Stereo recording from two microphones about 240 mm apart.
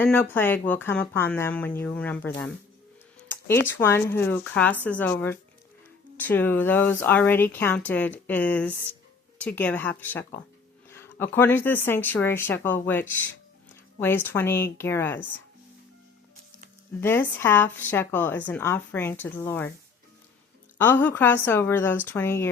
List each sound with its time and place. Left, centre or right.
0.0 s a woman's voice: centre
17.0 s a woman's voice: centre
20.8 s a woman's voice: centre